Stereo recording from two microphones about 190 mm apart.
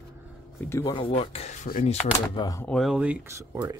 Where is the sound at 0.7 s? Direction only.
25° left (ahead or behind).